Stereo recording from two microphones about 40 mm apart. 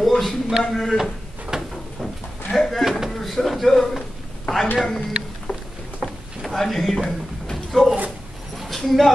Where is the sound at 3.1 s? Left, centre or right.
Centre.